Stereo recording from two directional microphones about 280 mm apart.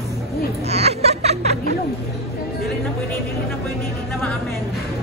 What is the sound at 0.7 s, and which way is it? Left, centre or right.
Music, right.